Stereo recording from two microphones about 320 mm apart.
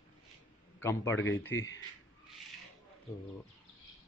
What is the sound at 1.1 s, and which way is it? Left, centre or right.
Speech, left.